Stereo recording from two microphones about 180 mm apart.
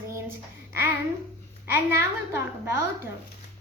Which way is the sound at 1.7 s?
15° right (ahead or behind).